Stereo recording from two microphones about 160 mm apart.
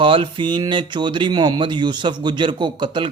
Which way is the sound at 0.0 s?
30° right (ahead or behind).